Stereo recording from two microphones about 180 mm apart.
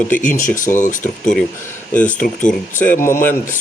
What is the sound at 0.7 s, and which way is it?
Speech, 45° left (ahead or behind).